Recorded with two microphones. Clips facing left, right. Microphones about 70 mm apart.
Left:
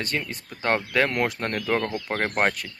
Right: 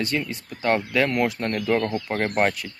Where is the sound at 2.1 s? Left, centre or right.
Left.